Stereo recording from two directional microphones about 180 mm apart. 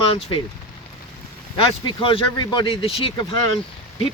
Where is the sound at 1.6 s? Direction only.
30° left (ahead or behind).